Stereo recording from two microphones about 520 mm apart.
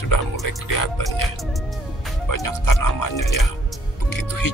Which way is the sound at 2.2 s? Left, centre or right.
Left.